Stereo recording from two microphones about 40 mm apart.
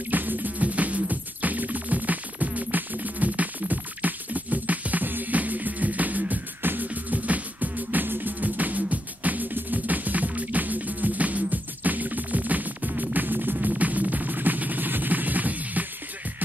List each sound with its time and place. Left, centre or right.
0.1 s music: right
6.9 s music: right
13.7 s music: right